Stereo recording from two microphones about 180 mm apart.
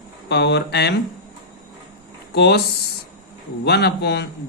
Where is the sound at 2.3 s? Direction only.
65° left (ahead or behind).